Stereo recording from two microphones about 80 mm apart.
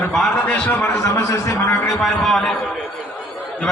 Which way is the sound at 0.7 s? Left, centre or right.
Left.